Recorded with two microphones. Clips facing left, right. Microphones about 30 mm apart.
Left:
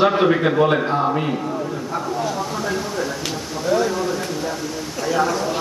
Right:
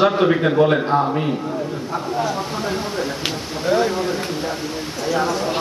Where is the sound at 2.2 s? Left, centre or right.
Right.